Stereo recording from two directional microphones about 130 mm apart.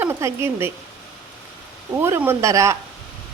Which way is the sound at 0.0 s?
20° right (ahead or behind).